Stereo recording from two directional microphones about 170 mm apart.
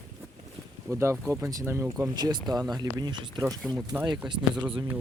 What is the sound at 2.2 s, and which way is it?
Speech, 25° right (ahead or behind).